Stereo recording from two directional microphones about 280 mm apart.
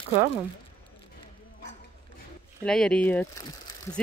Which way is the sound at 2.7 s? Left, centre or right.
Centre.